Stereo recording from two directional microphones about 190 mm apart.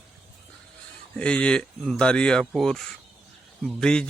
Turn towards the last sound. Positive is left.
turn(degrees=5)  # may be behind; listen again after turning